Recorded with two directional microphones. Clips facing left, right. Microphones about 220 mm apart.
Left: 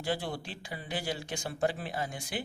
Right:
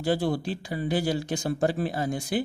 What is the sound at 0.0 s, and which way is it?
Speech, 40° right (ahead or behind).